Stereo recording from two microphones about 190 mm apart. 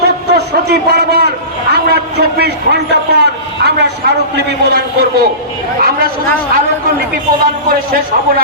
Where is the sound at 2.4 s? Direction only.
60° right (ahead or behind).